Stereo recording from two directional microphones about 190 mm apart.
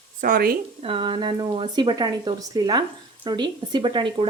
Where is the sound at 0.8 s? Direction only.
30° right (ahead or behind).